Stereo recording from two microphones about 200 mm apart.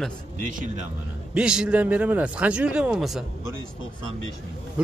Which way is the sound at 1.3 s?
5° right (ahead or behind).